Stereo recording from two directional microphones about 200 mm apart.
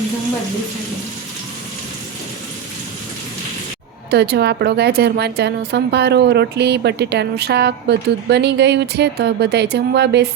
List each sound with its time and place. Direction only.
4.1 s a woman's voice: 55° right (ahead or behind)